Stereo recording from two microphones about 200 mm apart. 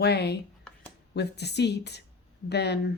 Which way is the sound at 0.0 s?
55° left (ahead or behind).